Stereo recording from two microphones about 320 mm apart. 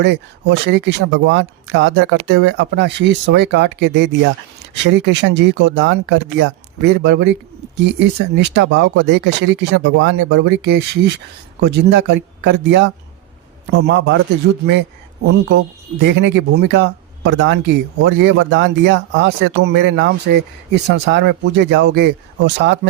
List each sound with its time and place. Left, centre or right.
0.0 s speech: right
16.0 s speech: right